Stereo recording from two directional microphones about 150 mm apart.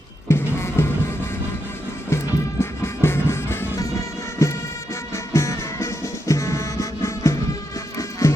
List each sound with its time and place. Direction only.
0.3 s music: 15° left (ahead or behind)
2.0 s music: 15° left (ahead or behind)